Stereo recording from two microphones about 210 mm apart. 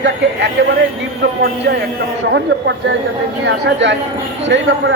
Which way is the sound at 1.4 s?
50° right (ahead or behind).